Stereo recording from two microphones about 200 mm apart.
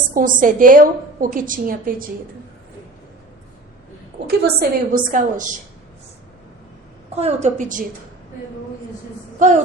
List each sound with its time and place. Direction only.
0.1 s a woman's voice: 40° right (ahead or behind)
4.3 s a woman's voice: 50° right (ahead or behind)
7.2 s a woman's voice: 35° right (ahead or behind)